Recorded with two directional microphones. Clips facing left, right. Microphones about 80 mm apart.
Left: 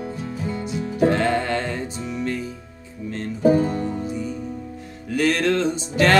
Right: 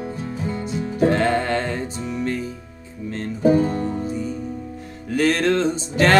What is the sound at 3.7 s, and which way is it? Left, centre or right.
Music, right.